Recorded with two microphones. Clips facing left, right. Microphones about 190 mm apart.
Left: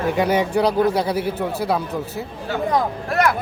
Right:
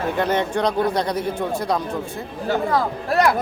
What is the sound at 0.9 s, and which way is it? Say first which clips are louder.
Speech: left 1 dB; 5° left (ahead or behind).